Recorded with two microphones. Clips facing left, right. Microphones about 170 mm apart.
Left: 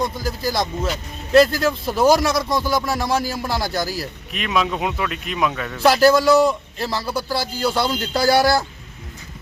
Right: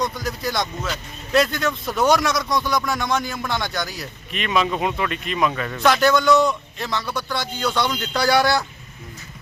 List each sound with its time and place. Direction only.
0.0 s speech: 25° left (ahead or behind)
0.3 s speech: centre (ahead or behind)
1.3 s a man's voice: 30° left (ahead or behind)
4.3 s speech: centre (ahead or behind)
5.8 s a man's voice: 35° left (ahead or behind)